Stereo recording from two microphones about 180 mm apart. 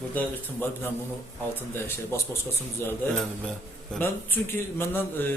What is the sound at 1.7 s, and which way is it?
A man's voice, 15° left (ahead or behind).